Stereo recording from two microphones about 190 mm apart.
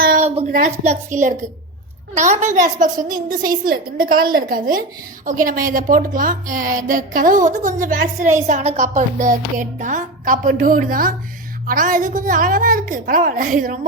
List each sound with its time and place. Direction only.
0.0 s a sound: 50° right (ahead or behind)
0.5 s a woman's voice: 45° right (ahead or behind)
2.1 s a child's voice: 40° right (ahead or behind)